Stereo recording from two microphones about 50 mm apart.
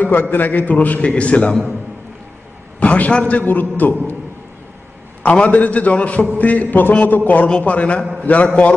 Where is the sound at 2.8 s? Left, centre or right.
Left.